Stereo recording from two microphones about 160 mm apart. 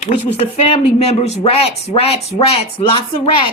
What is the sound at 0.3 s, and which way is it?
Speech, 40° left (ahead or behind).